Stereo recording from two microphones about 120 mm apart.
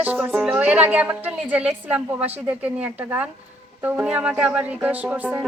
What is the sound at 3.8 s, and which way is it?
Speech, 10° right (ahead or behind).